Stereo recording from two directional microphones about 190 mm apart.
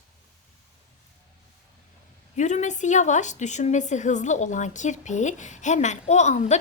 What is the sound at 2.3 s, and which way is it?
A woman's voice, 40° left (ahead or behind).